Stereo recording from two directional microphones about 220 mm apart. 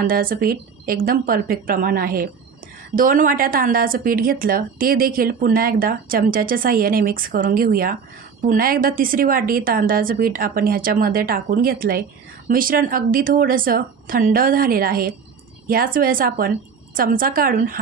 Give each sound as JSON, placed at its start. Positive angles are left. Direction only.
{"t": 0.0, "sound": "speech", "side_deg": -40}